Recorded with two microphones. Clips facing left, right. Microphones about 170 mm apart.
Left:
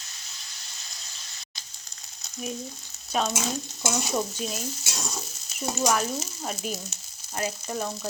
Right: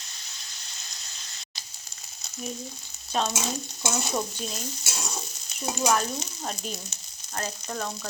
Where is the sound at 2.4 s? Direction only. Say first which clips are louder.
Left 2 dB; centre (ahead or behind).